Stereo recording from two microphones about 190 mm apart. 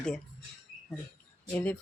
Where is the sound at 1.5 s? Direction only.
5° left (ahead or behind).